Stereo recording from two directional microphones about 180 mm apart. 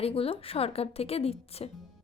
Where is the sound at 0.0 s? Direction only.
30° left (ahead or behind).